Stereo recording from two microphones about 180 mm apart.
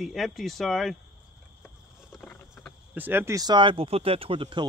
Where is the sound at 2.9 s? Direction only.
10° right (ahead or behind); by 4.7 s 30° right (ahead or behind).